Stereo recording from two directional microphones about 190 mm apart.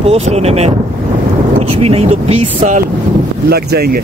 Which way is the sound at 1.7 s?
30° right (ahead or behind).